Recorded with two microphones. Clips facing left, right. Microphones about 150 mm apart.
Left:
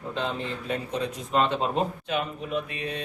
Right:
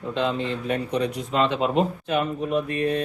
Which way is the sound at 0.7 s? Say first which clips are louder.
Right 4 dB; 80° right.